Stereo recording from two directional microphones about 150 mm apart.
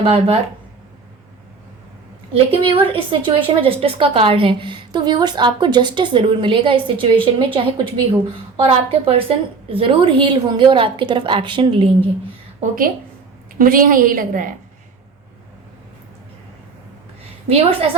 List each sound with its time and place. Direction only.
0.0 s a woman's voice: 40° right (ahead or behind)
2.3 s a woman's voice: 40° right (ahead or behind)
12.6 s a woman's voice: 50° right (ahead or behind)
13.6 s a woman's voice: 70° right (ahead or behind)
17.5 s a woman's voice: 40° right (ahead or behind)